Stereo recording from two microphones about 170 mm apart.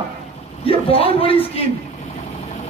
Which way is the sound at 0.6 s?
35° left (ahead or behind).